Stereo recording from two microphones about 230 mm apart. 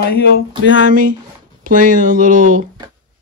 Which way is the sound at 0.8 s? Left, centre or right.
Right.